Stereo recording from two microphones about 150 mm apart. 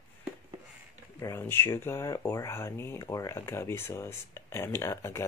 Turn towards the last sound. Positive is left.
turn(degrees=20)  # may be behind; listen again after turning